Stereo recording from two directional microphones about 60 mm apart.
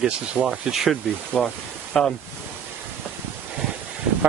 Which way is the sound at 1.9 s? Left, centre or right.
Centre.